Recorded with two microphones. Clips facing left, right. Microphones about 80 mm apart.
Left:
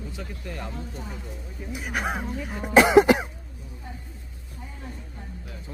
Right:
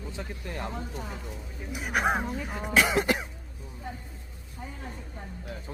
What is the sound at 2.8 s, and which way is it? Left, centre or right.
Cough, left.